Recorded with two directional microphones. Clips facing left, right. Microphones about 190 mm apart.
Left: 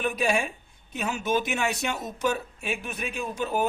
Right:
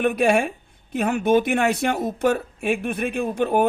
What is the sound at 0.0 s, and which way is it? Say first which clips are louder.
Speech: right 7 dB; 60° right (ahead or behind).